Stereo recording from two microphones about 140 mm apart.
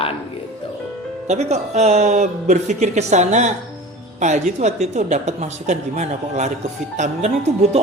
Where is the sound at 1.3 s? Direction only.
50° right (ahead or behind).